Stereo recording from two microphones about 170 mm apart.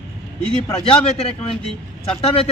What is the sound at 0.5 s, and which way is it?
A man's voice, 35° left (ahead or behind).